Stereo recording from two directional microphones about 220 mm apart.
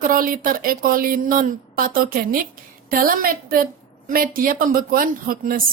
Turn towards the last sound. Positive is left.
turn(degrees=-40)  # may be behind; listen again after turning